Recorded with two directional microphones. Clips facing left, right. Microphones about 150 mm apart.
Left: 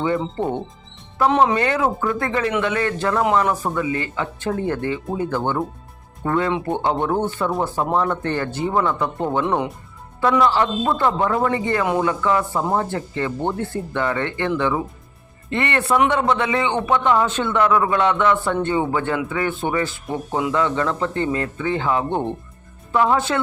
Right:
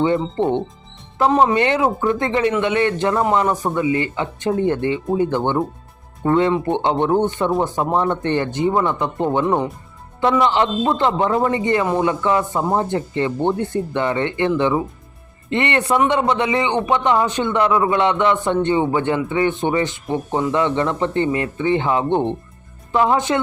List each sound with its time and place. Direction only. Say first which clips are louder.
0.0 s speech: right 4 dB; 25° right (ahead or behind)
9.4 s speech: right 1 dB; centre (ahead or behind)
10.2 s a man's voice: right 1 dB; 20° right (ahead or behind)